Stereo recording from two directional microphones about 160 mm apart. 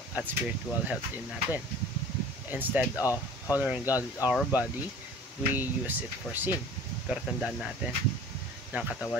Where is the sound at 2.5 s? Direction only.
10° right (ahead or behind).